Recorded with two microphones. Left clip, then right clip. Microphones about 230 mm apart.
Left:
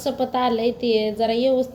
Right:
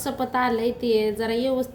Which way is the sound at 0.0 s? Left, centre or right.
Right.